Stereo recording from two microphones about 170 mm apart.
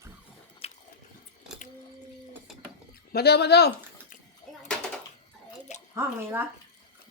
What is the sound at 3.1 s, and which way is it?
Speech, 70° left (ahead or behind).